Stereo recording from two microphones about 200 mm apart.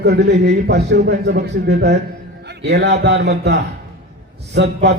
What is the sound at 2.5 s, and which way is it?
A man's voice, 55° right (ahead or behind).